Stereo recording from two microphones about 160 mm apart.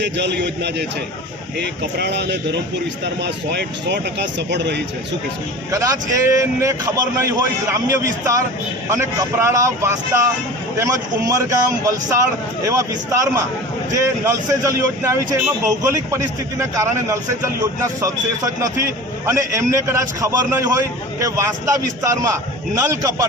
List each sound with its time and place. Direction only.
0.0 s speech: 90° right
5.7 s a man's voice: 20° right (ahead or behind)